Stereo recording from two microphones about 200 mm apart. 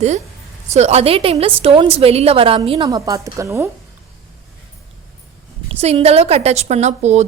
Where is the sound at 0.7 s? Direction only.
35° right (ahead or behind); by 3.7 s 15° right (ahead or behind).